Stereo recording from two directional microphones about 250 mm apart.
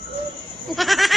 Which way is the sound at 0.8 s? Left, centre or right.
Centre.